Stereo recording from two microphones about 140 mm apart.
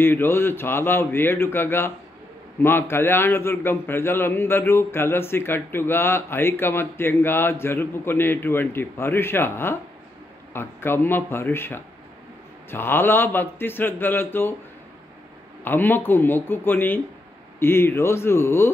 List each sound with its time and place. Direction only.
0.0 s a man's voice: 15° left (ahead or behind)
15.6 s a man's voice: 15° left (ahead or behind)